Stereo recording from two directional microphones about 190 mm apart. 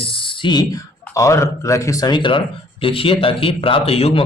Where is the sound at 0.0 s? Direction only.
25° left (ahead or behind).